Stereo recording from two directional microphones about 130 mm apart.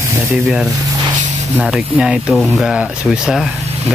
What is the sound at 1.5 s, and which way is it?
Speech, 5° right (ahead or behind).